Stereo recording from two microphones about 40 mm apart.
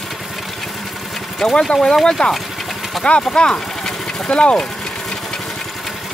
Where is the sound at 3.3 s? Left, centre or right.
Centre.